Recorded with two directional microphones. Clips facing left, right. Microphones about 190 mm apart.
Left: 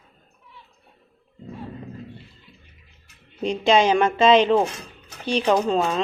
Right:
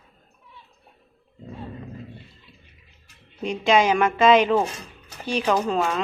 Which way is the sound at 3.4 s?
30° left (ahead or behind).